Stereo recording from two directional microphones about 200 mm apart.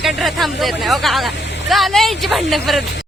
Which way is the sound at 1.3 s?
60° left (ahead or behind).